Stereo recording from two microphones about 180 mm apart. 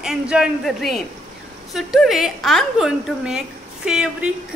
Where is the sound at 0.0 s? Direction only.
5° right (ahead or behind).